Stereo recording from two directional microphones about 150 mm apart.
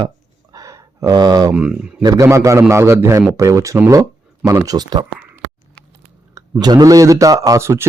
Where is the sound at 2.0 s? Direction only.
20° right (ahead or behind).